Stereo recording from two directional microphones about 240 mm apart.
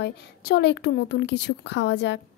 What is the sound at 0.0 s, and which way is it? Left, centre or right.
A woman's voice, left.